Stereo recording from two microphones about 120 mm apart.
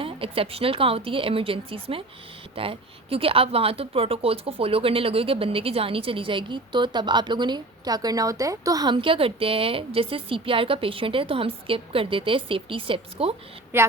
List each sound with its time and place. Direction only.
0.0 s speech: 50° right (ahead or behind)
13.7 s a woman's voice: 20° right (ahead or behind)